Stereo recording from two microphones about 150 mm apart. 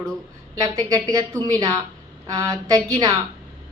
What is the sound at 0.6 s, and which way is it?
Speech, 25° right (ahead or behind).